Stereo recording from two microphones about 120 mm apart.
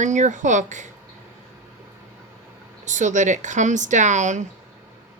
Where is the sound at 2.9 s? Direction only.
90° right.